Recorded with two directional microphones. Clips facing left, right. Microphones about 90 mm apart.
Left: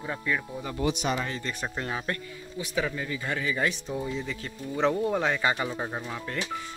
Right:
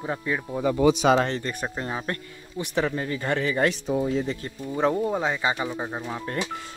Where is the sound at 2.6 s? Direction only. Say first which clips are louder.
Right 4 dB; 55° right (ahead or behind).